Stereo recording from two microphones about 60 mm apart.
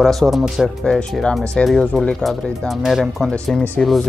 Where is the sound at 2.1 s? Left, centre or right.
Centre.